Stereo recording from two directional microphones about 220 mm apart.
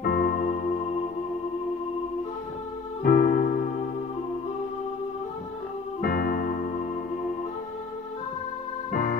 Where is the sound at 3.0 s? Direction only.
40° left (ahead or behind).